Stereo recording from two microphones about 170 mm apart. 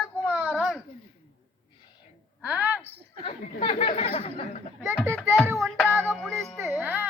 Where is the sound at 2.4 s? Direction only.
10° right (ahead or behind).